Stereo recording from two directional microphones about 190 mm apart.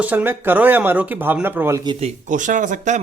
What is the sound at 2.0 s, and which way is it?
Speech, 35° right (ahead or behind).